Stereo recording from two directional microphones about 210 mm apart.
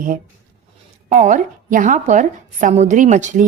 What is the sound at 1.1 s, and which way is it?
A woman's voice, 35° right (ahead or behind).